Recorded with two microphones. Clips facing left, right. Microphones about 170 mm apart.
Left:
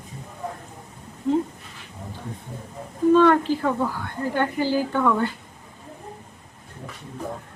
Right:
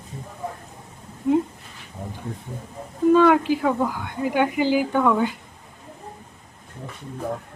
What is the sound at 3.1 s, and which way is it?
A woman's voice, 10° right (ahead or behind).